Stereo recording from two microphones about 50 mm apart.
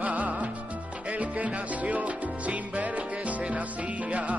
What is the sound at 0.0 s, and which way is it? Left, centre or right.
Music, right.